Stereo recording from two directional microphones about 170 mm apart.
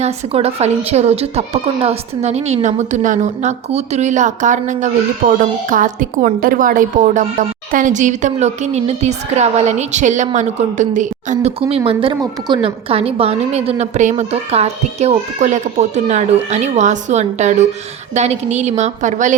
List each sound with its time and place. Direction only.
0.0 s a woman's voice: 40° right (ahead or behind)
11.9 s a woman's voice: 30° right (ahead or behind)